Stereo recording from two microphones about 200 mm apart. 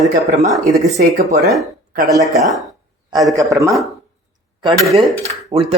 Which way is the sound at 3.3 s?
15° right (ahead or behind).